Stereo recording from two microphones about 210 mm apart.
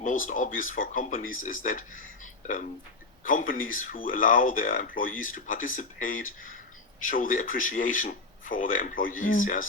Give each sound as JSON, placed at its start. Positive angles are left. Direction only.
{"t": 0.0, "sound": "speech", "side_deg": 40}